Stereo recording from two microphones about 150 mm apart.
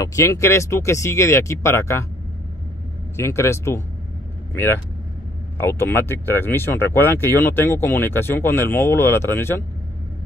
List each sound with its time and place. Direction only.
0.0 s speech: 20° left (ahead or behind)
3.2 s speech: 20° left (ahead or behind)
5.6 s speech: 15° left (ahead or behind)